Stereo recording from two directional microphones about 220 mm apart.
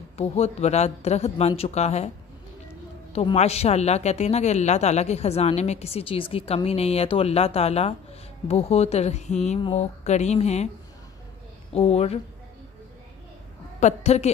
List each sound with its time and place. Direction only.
0.2 s speech: 30° left (ahead or behind)
3.1 s speech: 25° left (ahead or behind)
11.7 s speech: 25° left (ahead or behind)
13.7 s a woman's voice: 30° left (ahead or behind)